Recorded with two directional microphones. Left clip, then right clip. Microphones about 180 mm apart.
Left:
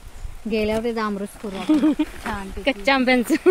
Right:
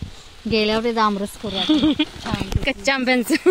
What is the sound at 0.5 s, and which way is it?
Speech, 15° right (ahead or behind).